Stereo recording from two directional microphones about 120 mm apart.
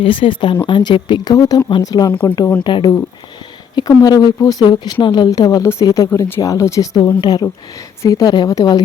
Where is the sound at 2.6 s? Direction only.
40° left (ahead or behind).